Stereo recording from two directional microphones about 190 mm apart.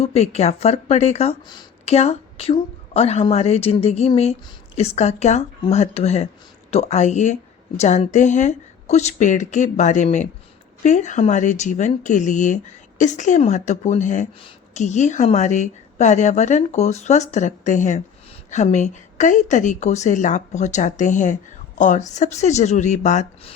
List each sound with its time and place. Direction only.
0.0 s a woman's voice: 35° left (ahead or behind)
1.5 s a sound: 20° left (ahead or behind)
1.9 s a woman's voice: 35° left (ahead or behind)